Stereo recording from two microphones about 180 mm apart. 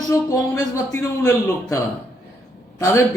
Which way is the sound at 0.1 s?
15° left (ahead or behind).